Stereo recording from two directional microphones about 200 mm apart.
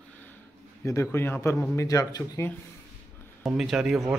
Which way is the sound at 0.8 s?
15° left (ahead or behind).